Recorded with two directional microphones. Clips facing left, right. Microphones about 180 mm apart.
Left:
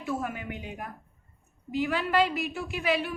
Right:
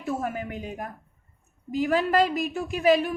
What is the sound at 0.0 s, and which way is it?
A woman's voice, 40° right (ahead or behind).